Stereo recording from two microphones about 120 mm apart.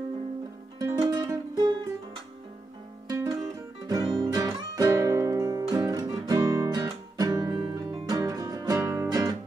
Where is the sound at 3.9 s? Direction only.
30° right (ahead or behind).